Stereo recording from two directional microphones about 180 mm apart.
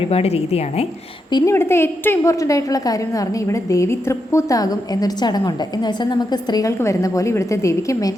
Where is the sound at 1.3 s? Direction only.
15° left (ahead or behind).